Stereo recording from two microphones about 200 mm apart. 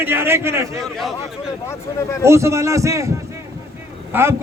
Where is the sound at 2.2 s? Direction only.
15° right (ahead or behind).